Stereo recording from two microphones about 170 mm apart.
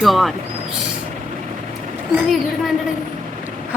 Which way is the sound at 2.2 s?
Centre (ahead or behind).